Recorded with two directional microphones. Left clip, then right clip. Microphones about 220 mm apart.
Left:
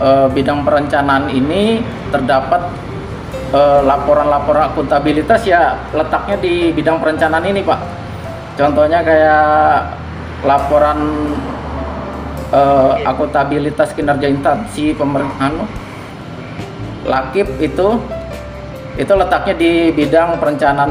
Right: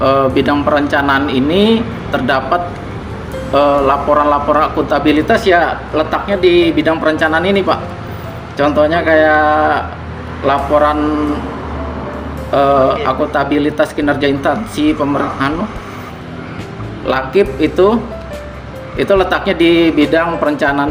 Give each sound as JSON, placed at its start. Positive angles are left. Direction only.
{"t": 0.0, "sound": "a man's voice", "side_deg": -50}
{"t": 12.5, "sound": "a man's voice", "side_deg": -50}
{"t": 17.1, "sound": "a man's voice", "side_deg": -50}
{"t": 18.9, "sound": "a man's voice", "side_deg": -50}